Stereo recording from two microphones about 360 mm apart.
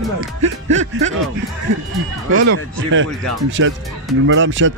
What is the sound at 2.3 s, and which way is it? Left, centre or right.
Speech, right.